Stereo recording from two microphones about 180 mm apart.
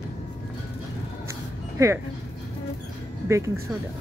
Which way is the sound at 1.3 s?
15° right (ahead or behind).